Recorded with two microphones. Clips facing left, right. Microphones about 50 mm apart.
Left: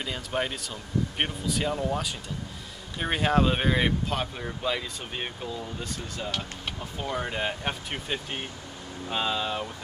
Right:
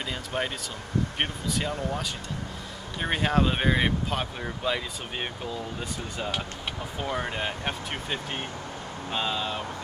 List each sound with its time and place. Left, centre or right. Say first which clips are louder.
0.0 s speech: even; centre
1.7 s speech: left 2 dB; centre
3.0 s speech: left 1 dB; centre